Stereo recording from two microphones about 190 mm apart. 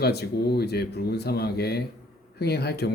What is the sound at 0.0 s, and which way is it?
Speech, 60° left (ahead or behind).